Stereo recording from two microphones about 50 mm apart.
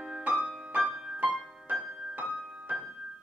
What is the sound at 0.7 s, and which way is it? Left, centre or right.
Music, right.